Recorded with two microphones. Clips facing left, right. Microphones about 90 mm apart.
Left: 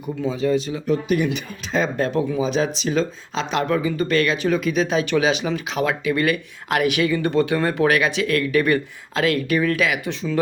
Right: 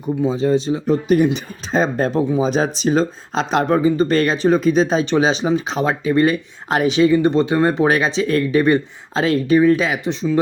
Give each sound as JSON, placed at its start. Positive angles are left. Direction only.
{"t": 0.3, "sound": "speech", "side_deg": -30}